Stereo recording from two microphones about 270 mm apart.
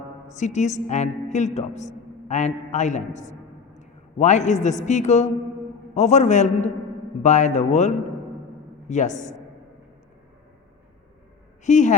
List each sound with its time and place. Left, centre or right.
0.3 s a woman's voice: left
11.6 s a woman's voice: left